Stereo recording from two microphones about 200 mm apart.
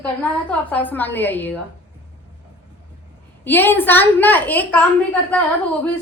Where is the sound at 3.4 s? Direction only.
10° left (ahead or behind).